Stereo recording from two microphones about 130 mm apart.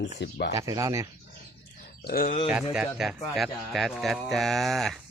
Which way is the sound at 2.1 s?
85° left.